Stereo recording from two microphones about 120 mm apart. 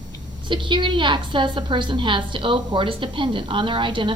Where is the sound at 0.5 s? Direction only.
45° right (ahead or behind).